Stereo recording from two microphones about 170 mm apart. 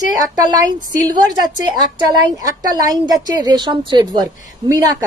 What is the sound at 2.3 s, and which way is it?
A woman's voice, 20° right (ahead or behind).